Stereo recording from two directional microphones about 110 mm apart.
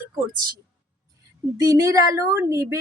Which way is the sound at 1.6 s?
30° right (ahead or behind).